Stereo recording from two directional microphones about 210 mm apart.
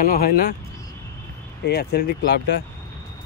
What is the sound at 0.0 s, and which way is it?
Speech, 45° left (ahead or behind).